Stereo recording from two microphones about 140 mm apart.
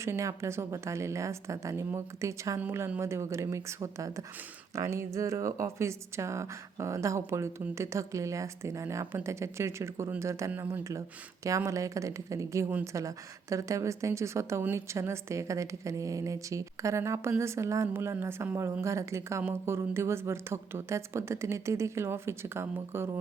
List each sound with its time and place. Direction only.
0.0 s a woman's voice: 20° right (ahead or behind)